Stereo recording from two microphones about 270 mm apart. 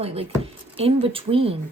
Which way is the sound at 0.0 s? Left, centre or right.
Right.